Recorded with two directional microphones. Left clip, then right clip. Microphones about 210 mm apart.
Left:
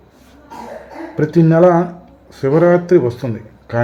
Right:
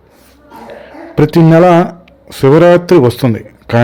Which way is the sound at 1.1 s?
35° right (ahead or behind).